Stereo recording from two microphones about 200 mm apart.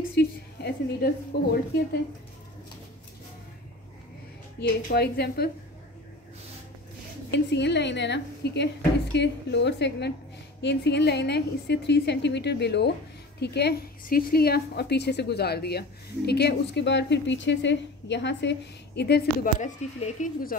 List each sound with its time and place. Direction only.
0.1 s a woman's voice: 55° left (ahead or behind)
4.6 s a woman's voice: 55° left (ahead or behind)
7.2 s a woman's voice: 60° left (ahead or behind)
19.6 s speech: 40° left (ahead or behind)